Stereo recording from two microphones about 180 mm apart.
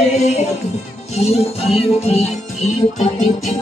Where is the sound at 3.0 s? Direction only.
45° left (ahead or behind).